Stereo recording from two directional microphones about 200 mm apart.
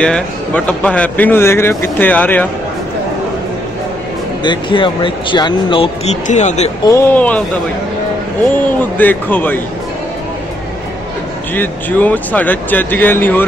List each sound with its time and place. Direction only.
0.0 s speech: 5° left (ahead or behind)
4.4 s speech: 25° left (ahead or behind)
6.9 s speech: 10° left (ahead or behind)
8.9 s speech: 10° left (ahead or behind)
11.5 s speech: 10° left (ahead or behind)